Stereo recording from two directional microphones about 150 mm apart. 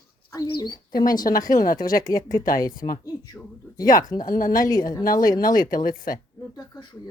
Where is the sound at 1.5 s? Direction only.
65° left (ahead or behind).